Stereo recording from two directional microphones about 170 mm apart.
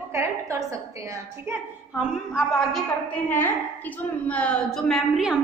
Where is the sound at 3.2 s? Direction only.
10° left (ahead or behind).